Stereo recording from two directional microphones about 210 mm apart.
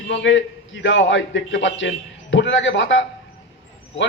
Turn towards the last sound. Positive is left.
turn(degrees=60)  # may be behind; listen again after turning